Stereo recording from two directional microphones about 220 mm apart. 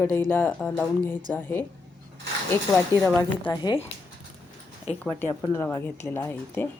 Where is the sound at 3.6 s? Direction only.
25° left (ahead or behind).